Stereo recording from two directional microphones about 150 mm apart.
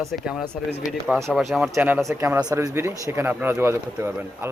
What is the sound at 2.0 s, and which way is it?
Speech, 20° right (ahead or behind).